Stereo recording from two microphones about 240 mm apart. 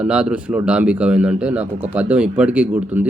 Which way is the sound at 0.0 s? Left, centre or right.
Centre.